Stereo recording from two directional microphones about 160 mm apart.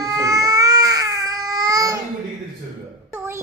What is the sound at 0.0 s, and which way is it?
Baby cry, 20° right (ahead or behind).